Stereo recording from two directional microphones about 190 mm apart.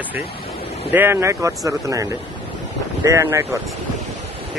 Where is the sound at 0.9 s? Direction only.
15° right (ahead or behind).